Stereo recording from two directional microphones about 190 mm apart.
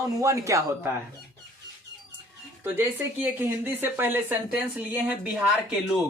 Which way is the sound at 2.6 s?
10° right (ahead or behind).